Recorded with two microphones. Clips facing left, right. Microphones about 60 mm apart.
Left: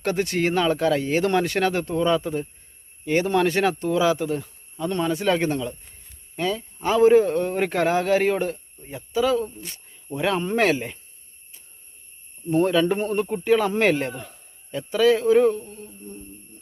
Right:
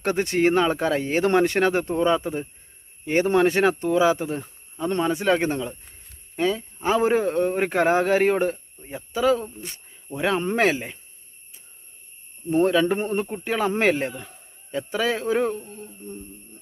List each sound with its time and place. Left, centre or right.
0.0 s speech: right
12.5 s speech: centre
12.8 s speech: right